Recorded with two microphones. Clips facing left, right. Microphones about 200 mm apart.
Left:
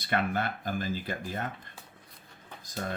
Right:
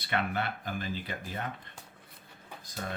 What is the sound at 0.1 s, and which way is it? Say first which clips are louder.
Speech: left 2 dB; 45° left (ahead or behind).